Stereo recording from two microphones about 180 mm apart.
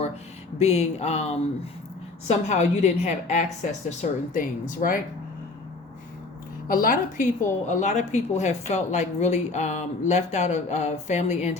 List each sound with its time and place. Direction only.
0.6 s a woman's voice: 35° left (ahead or behind)
6.7 s a woman's voice: 50° left (ahead or behind)